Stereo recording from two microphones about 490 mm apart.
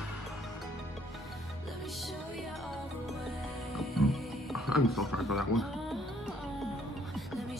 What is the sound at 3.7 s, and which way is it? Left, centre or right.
Music, centre.